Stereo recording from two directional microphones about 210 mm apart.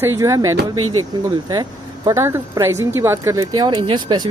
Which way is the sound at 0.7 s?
90° right.